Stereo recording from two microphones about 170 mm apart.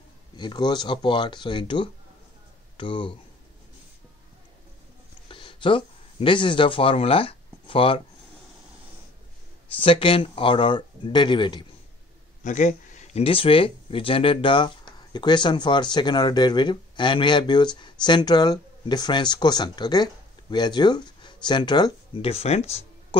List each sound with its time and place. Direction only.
0.4 s speech: 25° left (ahead or behind)
5.3 s speech: 30° left (ahead or behind)
9.8 s speech: 30° left (ahead or behind)
12.4 s speech: 45° left (ahead or behind)